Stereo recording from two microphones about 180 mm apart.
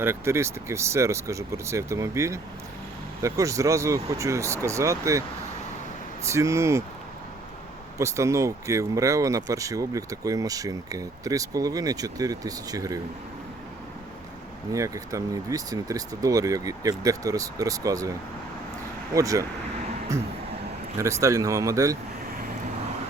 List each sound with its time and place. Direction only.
0.0 s speech: 15° right (ahead or behind)
6.2 s speech: 15° right (ahead or behind)
7.9 s speech: 15° right (ahead or behind)
14.7 s speech: 20° right (ahead or behind)
19.1 s speech: 20° right (ahead or behind)
21.0 s speech: 15° right (ahead or behind)